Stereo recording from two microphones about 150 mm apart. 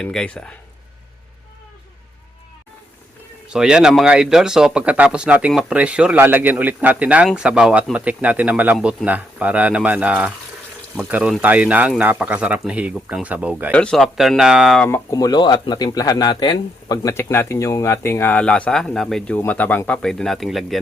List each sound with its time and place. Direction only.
0.0 s speech: 5° left (ahead or behind)
3.5 s speech: 5° right (ahead or behind)
13.7 s speech: 5° left (ahead or behind)
14.8 s speech: 20° left (ahead or behind); by 20.7 s centre (ahead or behind)